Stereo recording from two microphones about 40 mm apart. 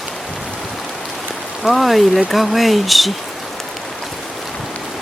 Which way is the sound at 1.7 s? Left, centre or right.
Centre.